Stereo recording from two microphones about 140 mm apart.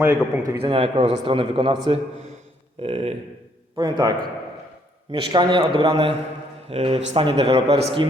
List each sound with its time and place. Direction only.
0.0 s a man's voice: 15° right (ahead or behind)
0.6 s a man's voice: 40° right (ahead or behind)
3.8 s a man's voice: 30° right (ahead or behind)
5.1 s a man's voice: 35° right (ahead or behind)